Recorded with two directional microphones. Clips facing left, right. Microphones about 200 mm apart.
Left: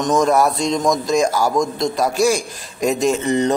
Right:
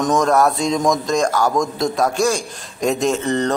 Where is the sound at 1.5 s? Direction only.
Centre (ahead or behind).